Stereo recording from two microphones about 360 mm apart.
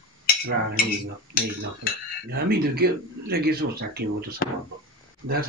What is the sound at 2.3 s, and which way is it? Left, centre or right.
Speech, right.